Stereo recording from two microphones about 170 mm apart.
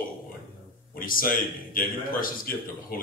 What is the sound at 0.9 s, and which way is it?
A man's voice, 55° left (ahead or behind).